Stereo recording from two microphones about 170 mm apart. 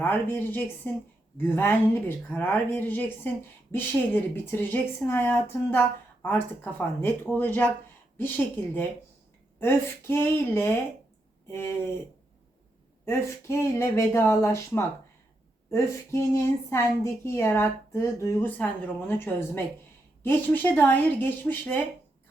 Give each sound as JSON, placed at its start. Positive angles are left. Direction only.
{"t": 0.0, "sound": "a woman's voice", "side_deg": 10}
{"t": 9.6, "sound": "a woman's voice", "side_deg": 15}
{"t": 13.1, "sound": "a woman's voice", "side_deg": 15}